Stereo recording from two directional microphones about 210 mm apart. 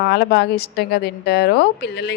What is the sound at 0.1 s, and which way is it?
A woman's voice, 50° left (ahead or behind).